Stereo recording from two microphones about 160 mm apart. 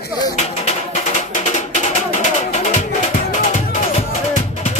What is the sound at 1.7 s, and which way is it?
Music, 50° left (ahead or behind).